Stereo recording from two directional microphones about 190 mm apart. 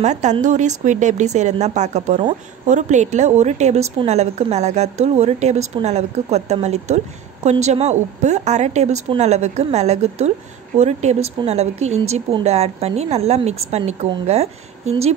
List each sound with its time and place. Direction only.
0.0 s a woman's voice: 35° right (ahead or behind)